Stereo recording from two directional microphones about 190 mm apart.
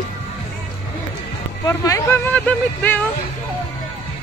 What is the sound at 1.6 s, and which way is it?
Speech, 15° left (ahead or behind).